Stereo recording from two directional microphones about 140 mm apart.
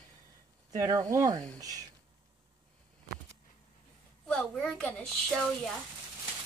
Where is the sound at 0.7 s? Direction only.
25° right (ahead or behind).